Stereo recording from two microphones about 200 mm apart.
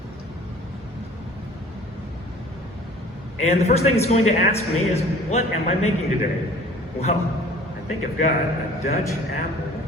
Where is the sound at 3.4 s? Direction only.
35° left (ahead or behind).